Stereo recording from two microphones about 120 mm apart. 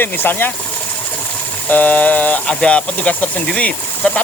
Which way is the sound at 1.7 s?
15° left (ahead or behind).